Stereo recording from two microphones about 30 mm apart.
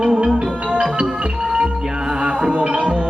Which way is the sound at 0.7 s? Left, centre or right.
Right.